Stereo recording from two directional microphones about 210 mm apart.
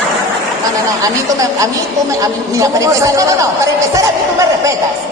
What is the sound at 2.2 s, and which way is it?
Speech, 15° right (ahead or behind).